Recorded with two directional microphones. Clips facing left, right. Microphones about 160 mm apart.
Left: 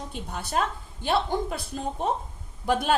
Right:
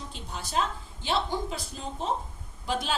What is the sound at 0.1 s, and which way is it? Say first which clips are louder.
A woman's voice: left 4 dB; 55° left (ahead or behind).